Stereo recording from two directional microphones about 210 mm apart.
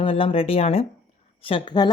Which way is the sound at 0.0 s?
25° left (ahead or behind).